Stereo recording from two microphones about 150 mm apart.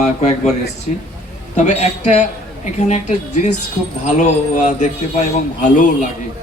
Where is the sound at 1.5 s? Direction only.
50° left (ahead or behind).